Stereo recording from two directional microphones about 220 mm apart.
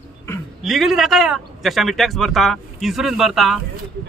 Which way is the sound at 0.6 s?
Centre (ahead or behind).